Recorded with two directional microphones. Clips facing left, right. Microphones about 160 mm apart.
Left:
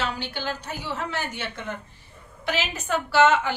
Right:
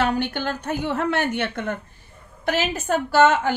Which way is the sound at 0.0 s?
55° right (ahead or behind).